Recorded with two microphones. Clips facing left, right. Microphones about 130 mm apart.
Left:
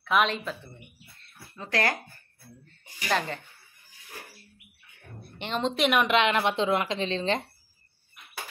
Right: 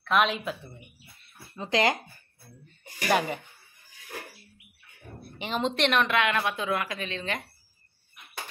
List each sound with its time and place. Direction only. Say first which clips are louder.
0.0 s speech: even; centre (ahead or behind)
1.2 s a sound: right 3 dB; 20° right (ahead or behind)
3.1 s speech: right 3 dB; 10° right (ahead or behind)
5.4 s a woman's voice: even; centre (ahead or behind)
6.0 s a woman's voice: left 3 dB; 20° left (ahead or behind)